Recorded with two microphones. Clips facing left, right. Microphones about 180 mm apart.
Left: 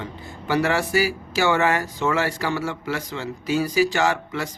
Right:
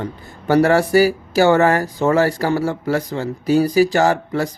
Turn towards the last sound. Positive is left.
turn(degrees=-40)  # may be behind; listen again after turning